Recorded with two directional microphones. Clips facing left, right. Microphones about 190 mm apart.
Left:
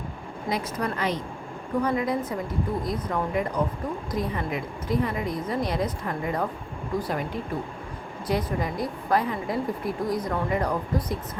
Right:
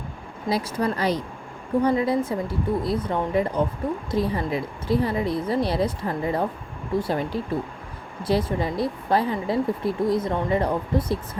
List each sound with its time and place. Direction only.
0.5 s speech: 35° right (ahead or behind)